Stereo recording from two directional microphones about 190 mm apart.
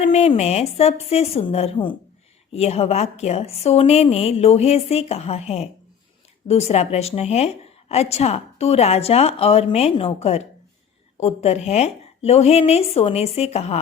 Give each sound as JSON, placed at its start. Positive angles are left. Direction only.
{"t": 0.0, "sound": "a woman's voice", "side_deg": 30}